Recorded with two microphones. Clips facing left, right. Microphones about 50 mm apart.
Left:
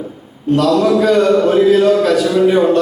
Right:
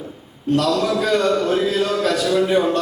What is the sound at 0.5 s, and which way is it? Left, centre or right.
A man's voice, centre.